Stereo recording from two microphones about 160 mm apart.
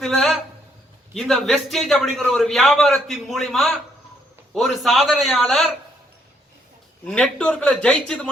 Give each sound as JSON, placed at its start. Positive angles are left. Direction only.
{"t": 0.0, "sound": "a sound", "side_deg": 0}
{"t": 1.1, "sound": "a man's voice", "side_deg": 0}
{"t": 7.0, "sound": "speech", "side_deg": 5}